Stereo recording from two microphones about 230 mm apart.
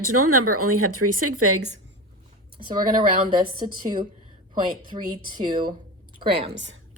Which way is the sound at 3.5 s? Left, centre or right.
Right.